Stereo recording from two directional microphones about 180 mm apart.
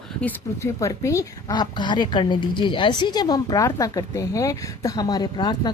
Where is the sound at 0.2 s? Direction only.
10° left (ahead or behind).